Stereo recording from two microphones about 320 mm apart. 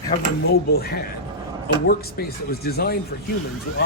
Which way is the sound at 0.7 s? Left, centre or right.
Left.